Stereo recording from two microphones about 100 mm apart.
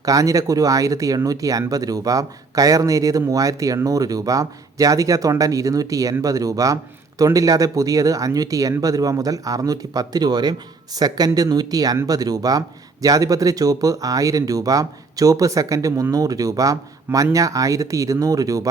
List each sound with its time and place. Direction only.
0.0 s speech: 35° right (ahead or behind)